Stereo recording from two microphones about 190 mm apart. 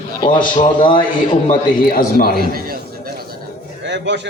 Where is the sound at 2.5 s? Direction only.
50° right (ahead or behind).